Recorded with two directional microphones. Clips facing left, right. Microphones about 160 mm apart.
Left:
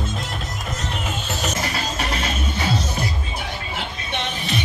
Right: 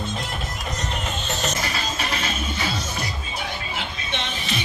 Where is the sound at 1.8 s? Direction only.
40° left (ahead or behind).